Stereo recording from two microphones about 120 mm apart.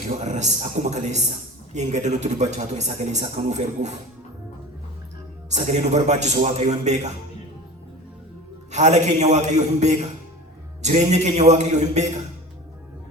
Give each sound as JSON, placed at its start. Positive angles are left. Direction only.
{"t": 0.1, "sound": "speech", "side_deg": -80}
{"t": 5.5, "sound": "speech", "side_deg": -75}
{"t": 8.7, "sound": "speech", "side_deg": -75}